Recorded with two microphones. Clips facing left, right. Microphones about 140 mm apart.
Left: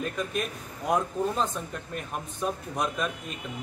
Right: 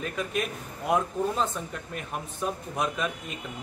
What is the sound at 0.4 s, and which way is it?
A man's voice, centre (ahead or behind).